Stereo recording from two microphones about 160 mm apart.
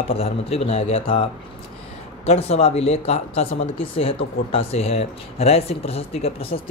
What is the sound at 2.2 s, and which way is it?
Speech, 40° left (ahead or behind).